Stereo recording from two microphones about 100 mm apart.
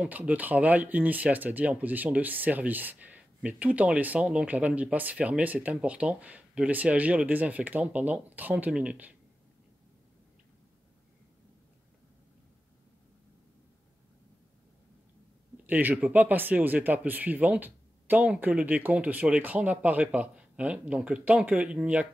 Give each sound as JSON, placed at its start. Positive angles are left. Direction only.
{"t": 0.0, "sound": "speech", "side_deg": -15}
{"t": 15.6, "sound": "speech", "side_deg": -15}